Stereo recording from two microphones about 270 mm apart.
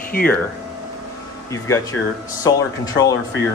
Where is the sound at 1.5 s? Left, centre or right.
Centre.